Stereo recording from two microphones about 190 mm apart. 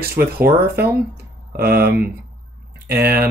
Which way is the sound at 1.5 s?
55° right (ahead or behind).